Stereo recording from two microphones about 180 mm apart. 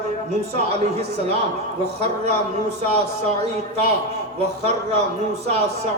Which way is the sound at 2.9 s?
35° right (ahead or behind).